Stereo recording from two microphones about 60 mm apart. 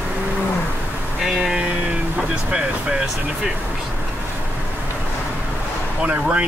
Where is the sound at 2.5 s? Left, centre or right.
Centre.